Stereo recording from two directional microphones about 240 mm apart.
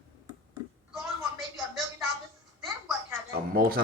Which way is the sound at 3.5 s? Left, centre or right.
Right.